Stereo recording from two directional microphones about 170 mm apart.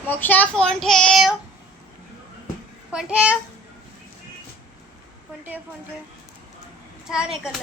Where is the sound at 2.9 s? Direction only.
5° right (ahead or behind).